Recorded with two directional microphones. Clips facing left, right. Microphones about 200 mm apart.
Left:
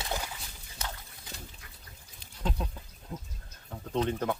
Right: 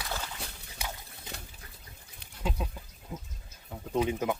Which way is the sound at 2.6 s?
5° right (ahead or behind).